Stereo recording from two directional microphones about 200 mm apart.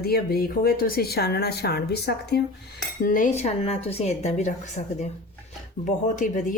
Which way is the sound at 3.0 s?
40° left (ahead or behind).